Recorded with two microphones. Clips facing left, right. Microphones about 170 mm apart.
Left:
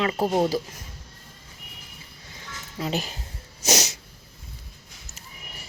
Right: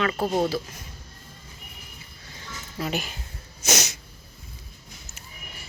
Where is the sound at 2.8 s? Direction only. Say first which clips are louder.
Left 1 dB; 35° left (ahead or behind).